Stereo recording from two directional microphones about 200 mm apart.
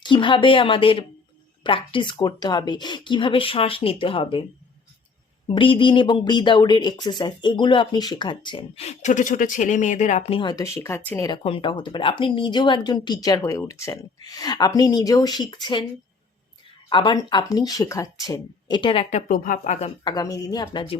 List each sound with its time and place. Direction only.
0.0 s speech: 25° left (ahead or behind)
5.5 s speech: 25° left (ahead or behind)
11.3 s speech: 25° left (ahead or behind)
16.9 s speech: 25° left (ahead or behind)
19.3 s speech: 40° left (ahead or behind)
20.1 s speech: 20° left (ahead or behind)